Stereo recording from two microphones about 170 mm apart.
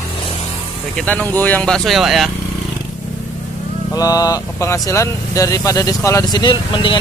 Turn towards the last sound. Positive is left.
turn(degrees=30)  # may be behind; listen again after turning